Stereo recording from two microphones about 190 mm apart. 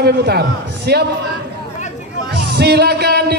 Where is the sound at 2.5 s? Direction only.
60° right (ahead or behind).